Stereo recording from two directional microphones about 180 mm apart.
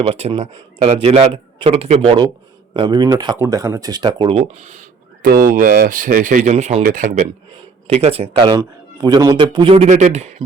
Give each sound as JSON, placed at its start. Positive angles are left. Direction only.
{"t": 0.0, "sound": "speech", "side_deg": -35}
{"t": 5.2, "sound": "speech", "side_deg": -50}
{"t": 7.9, "sound": "speech", "side_deg": -35}